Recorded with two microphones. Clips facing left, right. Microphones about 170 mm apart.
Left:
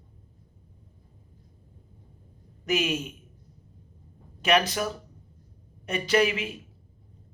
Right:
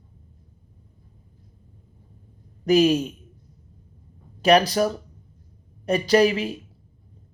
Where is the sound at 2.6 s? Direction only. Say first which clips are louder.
Right 10 dB; 35° right (ahead or behind).